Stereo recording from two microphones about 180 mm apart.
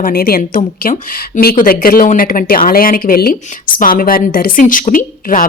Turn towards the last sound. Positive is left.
turn(degrees=50)  # may be behind; listen again after turning